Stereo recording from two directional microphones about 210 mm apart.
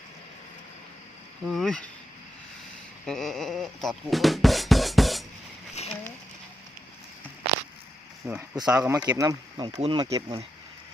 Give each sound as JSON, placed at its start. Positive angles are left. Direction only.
{"t": 1.5, "sound": "speech", "side_deg": 0}
{"t": 3.1, "sound": "speech", "side_deg": 0}
{"t": 5.7, "sound": "a sound", "side_deg": 30}
{"t": 8.3, "sound": "speech", "side_deg": -10}
{"t": 9.0, "sound": "speech", "side_deg": -15}